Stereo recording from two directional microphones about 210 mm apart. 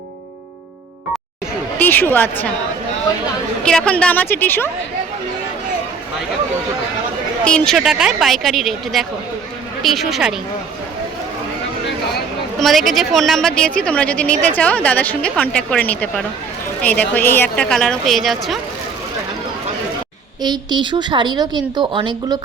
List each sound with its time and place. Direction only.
1.8 s a woman's voice: 10° left (ahead or behind)
3.6 s a woman's voice: 5° left (ahead or behind)
7.4 s speech: 5° left (ahead or behind)
12.5 s speech: centre (ahead or behind)
20.4 s speech: 20° right (ahead or behind)